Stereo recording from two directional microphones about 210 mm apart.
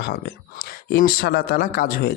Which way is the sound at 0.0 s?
55° left (ahead or behind).